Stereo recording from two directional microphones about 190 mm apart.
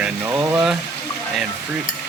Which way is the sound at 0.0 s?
10° right (ahead or behind).